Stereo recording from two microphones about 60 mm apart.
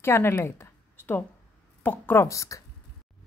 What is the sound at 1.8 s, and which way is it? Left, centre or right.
Speech, left.